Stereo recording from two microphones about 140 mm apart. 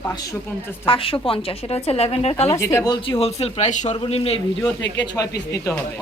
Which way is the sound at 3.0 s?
45° left (ahead or behind).